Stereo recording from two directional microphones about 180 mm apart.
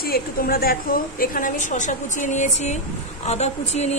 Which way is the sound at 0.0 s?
55° left (ahead or behind).